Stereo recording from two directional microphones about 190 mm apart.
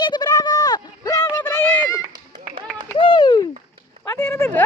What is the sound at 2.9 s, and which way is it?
Pigeon, 25° left (ahead or behind).